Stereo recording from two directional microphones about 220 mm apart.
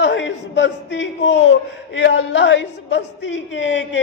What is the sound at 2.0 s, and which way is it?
Speech, 55° left (ahead or behind).